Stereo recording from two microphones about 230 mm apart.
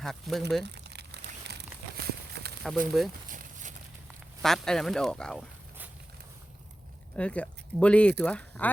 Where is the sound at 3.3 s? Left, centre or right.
Right.